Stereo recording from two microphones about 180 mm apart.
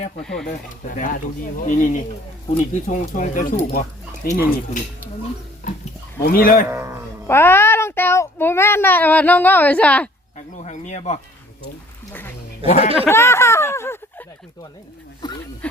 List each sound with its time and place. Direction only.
0.2 s speech: 5° left (ahead or behind)
0.4 s speech: 45° left (ahead or behind)
5.6 s dog: 45° left (ahead or behind)
6.2 s speech: 55° left (ahead or behind)
6.7 s speech: 15° right (ahead or behind)
7.3 s a child's voice: 10° left (ahead or behind)
10.3 s a sound: 40° left (ahead or behind)
12.6 s speech: 40° left (ahead or behind)
13.1 s speech: 15° left (ahead or behind)